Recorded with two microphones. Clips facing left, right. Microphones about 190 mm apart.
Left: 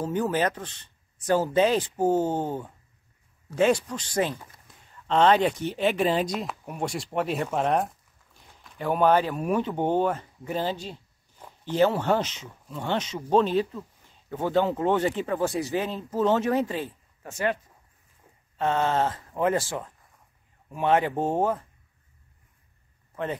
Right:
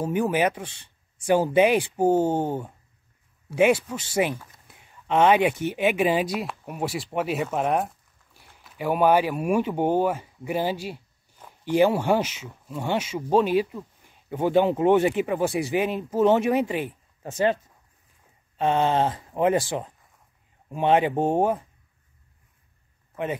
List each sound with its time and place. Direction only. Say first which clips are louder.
0.0 s speech: right 2 dB; 10° right (ahead or behind)
4.6 s a sound: right 1 dB; 10° right (ahead or behind)
5.8 s speech: right 1 dB; 10° right (ahead or behind)
18.6 s speech: right 3 dB; 20° right (ahead or behind)